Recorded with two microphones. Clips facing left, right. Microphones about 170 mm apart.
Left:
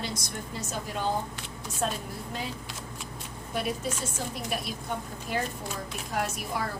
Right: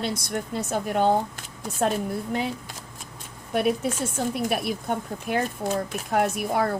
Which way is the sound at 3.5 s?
60° right (ahead or behind).